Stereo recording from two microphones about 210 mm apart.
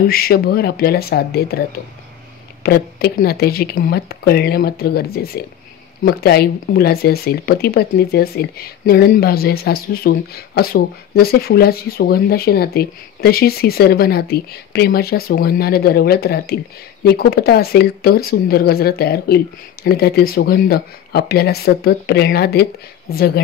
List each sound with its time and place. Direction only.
0.0 s speech: 45° left (ahead or behind)
2.6 s speech: 45° left (ahead or behind)